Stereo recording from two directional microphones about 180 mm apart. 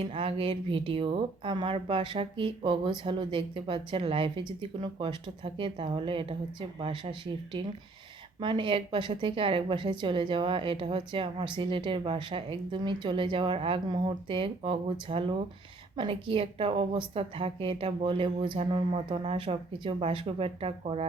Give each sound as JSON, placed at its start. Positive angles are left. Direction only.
{"t": 0.0, "sound": "a woman's voice", "side_deg": -30}